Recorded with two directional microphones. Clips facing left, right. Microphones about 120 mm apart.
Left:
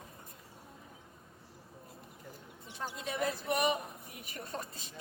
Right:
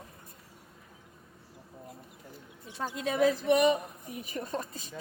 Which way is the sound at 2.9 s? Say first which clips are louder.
Right 10 dB; 90° right.